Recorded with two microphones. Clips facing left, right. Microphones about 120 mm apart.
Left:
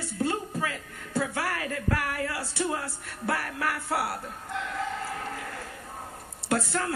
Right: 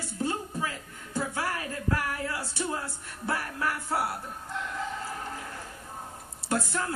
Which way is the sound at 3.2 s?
70° left (ahead or behind).